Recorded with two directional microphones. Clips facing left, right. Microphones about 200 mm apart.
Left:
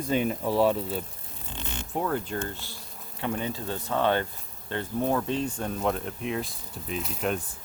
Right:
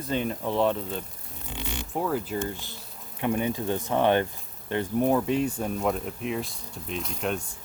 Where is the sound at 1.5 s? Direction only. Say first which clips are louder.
Right 3 dB; 10° right (ahead or behind).